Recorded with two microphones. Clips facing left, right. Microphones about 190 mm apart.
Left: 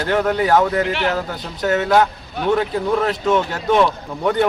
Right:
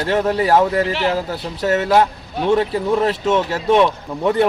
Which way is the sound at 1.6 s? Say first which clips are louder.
Even; 5° right (ahead or behind).